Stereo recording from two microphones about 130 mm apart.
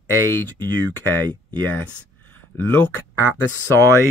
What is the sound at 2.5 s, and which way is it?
Speech, 10° left (ahead or behind).